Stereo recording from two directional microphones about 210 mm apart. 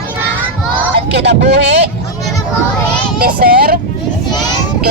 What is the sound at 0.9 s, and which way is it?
Speech, 50° right (ahead or behind).